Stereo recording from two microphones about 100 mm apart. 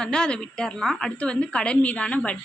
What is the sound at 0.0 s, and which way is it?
A woman's voice, 5° left (ahead or behind).